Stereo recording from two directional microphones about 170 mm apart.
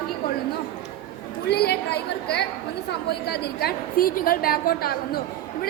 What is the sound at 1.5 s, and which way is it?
A woman's voice, 75° left (ahead or behind).